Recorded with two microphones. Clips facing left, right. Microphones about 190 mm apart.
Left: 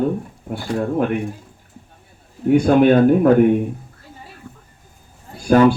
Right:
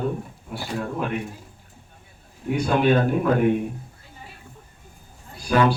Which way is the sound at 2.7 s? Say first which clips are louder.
Left 8 dB; 50° left (ahead or behind).